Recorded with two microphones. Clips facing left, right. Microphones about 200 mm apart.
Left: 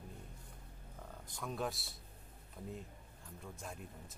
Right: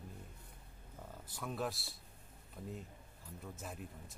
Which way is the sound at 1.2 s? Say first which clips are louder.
Even; 5° right (ahead or behind).